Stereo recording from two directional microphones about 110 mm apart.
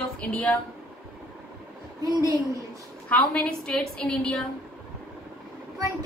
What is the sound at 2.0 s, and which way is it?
Speech, 35° right (ahead or behind).